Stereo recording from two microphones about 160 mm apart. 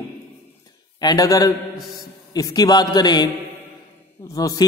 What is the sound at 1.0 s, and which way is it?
A man's voice, 20° left (ahead or behind).